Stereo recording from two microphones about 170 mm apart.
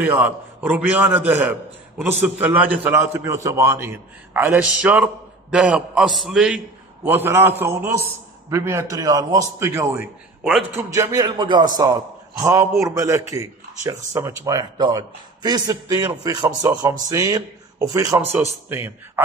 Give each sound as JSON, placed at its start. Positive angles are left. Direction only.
{"t": 0.0, "sound": "a man's voice", "side_deg": -10}
{"t": 7.1, "sound": "a man's voice", "side_deg": -15}